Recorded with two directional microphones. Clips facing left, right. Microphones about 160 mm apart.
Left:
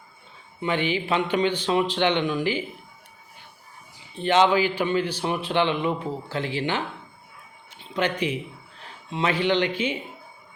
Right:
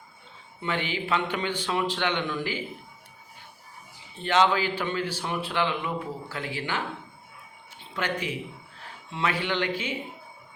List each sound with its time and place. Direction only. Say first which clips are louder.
0.6 s a man's voice: left 5 dB; 20° left (ahead or behind)
4.1 s a man's voice: left 4 dB; 20° left (ahead or behind)
7.9 s a man's voice: left 5 dB; 20° left (ahead or behind)